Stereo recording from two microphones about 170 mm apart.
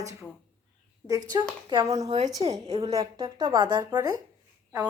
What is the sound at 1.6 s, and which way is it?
Speech, 25° right (ahead or behind).